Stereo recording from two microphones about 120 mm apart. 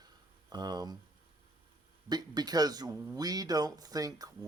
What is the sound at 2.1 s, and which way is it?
A man's voice, 35° right (ahead or behind).